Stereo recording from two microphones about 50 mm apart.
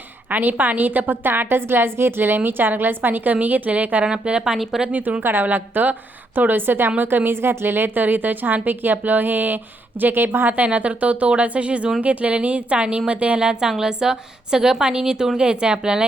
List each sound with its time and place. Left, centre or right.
0.3 s a woman's voice: right
4.0 s a woman's voice: centre
4.9 s a woman's voice: right
5.2 s a woman's voice: right; by 16.0 s centre